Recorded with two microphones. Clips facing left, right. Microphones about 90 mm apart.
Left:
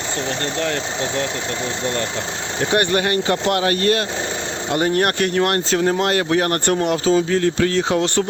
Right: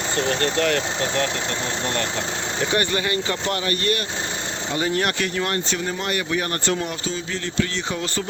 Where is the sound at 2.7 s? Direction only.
55° left (ahead or behind).